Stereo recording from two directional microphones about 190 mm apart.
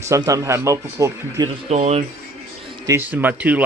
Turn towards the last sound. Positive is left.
turn(degrees=-10)  # may be behind; listen again after turning